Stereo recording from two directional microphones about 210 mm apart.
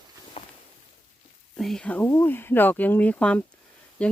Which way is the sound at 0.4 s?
25° left (ahead or behind).